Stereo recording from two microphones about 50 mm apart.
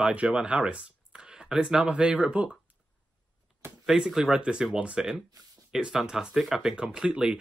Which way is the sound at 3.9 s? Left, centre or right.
Centre.